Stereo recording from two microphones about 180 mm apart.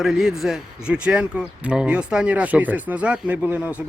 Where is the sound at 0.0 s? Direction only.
Centre (ahead or behind).